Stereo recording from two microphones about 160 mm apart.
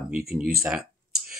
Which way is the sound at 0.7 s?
Centre (ahead or behind).